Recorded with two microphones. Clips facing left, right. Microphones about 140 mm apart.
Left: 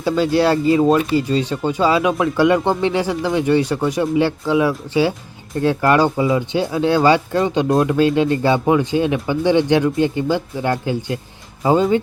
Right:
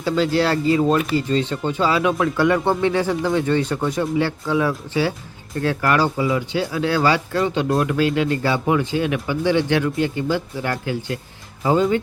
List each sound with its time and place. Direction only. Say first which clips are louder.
0.0 s speech: left 3 dB; 20° left (ahead or behind)